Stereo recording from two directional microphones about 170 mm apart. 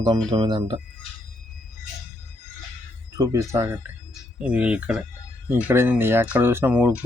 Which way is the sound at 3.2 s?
20° right (ahead or behind).